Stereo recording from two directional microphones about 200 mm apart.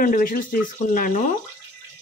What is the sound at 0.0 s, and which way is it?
Speech, 45° left (ahead or behind).